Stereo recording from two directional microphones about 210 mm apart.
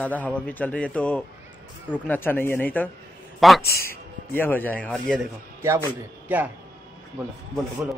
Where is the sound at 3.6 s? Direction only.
45° left (ahead or behind).